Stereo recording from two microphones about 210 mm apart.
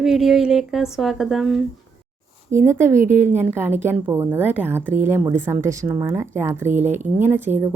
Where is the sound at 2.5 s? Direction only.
10° right (ahead or behind).